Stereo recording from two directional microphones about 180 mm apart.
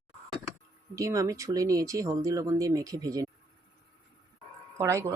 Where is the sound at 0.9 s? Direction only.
15° right (ahead or behind).